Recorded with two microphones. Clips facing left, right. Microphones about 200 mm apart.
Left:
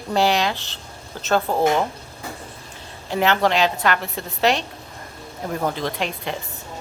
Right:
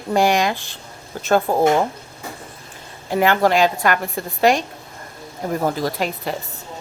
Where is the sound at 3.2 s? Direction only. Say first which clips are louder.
Right 3 dB; 10° right (ahead or behind).